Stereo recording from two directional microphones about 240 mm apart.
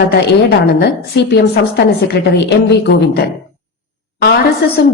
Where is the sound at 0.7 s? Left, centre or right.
Left.